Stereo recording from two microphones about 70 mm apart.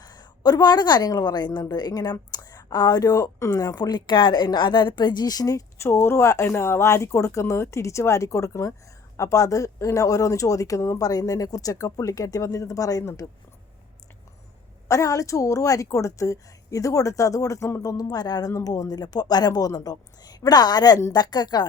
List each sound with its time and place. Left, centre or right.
0.0 s a woman's voice: left
1.7 s a woman's voice: left
5.8 s speech: left
14.8 s speech: left
17.8 s a woman's voice: left
18.5 s a woman's voice: left